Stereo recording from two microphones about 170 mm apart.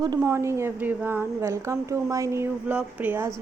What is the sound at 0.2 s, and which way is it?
Speech, 15° right (ahead or behind).